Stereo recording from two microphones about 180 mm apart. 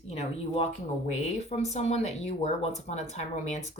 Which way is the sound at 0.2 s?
35° left (ahead or behind).